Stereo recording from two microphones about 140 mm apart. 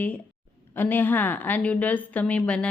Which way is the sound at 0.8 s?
15° left (ahead or behind).